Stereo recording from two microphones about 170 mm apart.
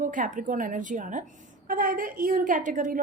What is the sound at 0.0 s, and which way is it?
A woman's voice, 50° right (ahead or behind).